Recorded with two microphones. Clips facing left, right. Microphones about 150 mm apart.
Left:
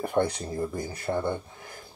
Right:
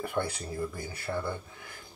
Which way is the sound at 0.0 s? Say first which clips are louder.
Left 6 dB; 35° left (ahead or behind).